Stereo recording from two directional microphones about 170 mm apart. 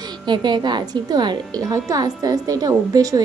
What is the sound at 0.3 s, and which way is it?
Speech, 25° right (ahead or behind).